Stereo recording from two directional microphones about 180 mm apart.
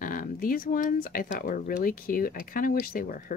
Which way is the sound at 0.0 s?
50° left (ahead or behind).